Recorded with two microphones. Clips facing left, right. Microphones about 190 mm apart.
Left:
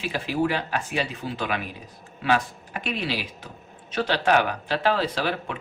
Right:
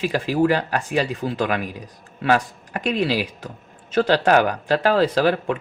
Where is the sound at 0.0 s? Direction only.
40° right (ahead or behind).